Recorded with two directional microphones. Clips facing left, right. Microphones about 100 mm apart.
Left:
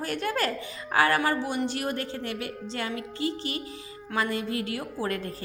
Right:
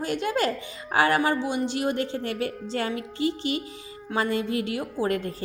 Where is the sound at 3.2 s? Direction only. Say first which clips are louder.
Right 4 dB; 35° left (ahead or behind).